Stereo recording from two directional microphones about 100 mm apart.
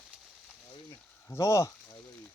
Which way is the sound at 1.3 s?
30° left (ahead or behind).